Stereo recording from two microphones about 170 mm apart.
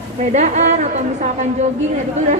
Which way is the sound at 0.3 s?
45° right (ahead or behind).